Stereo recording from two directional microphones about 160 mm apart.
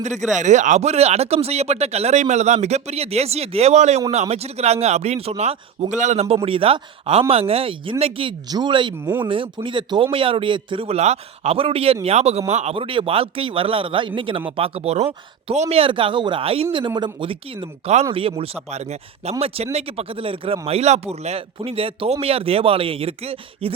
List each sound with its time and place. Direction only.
0.0 s speech: 45° right (ahead or behind)